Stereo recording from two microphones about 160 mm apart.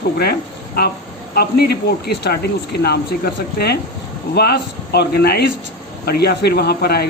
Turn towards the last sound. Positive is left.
turn(degrees=80)